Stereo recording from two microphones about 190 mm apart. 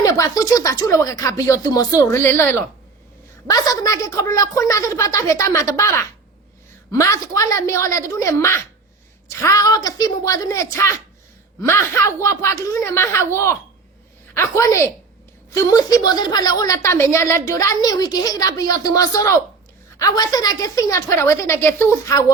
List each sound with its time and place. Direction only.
0.0 s a woman's voice: 15° left (ahead or behind)